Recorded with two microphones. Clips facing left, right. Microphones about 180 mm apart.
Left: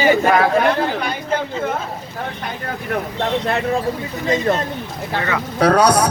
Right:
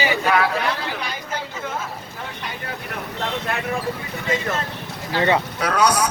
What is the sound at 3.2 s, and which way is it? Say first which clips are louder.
A woman's voice: left 5 dB; 35° left (ahead or behind).